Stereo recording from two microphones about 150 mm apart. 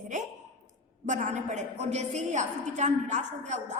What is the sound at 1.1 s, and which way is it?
A woman's voice, 55° right (ahead or behind).